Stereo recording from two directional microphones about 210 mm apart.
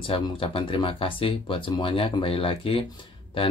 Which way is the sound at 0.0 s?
25° left (ahead or behind).